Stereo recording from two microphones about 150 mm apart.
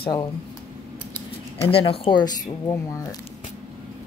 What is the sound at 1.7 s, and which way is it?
Speech, 40° left (ahead or behind).